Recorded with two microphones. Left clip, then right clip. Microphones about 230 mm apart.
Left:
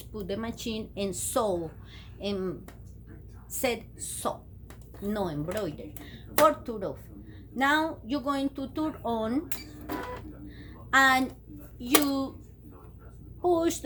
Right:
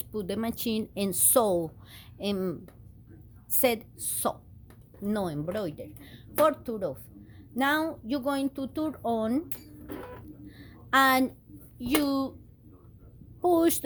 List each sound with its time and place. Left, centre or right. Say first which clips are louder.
0.0 s speech: right 2 dB; right
10.5 s a sound: left 1 dB; right
12.0 s speech: right 1 dB; right
13.4 s speech: right 2 dB; right